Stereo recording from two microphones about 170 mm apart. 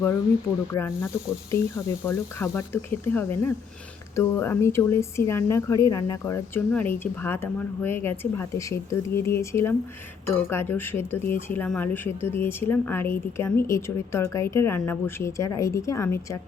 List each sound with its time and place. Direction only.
0.7 s speech: 15° left (ahead or behind)